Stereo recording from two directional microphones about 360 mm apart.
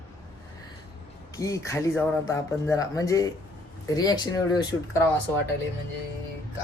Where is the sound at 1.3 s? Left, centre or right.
Centre.